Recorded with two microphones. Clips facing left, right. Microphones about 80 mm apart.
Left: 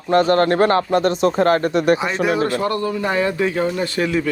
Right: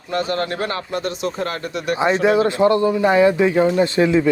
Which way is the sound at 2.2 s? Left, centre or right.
Right.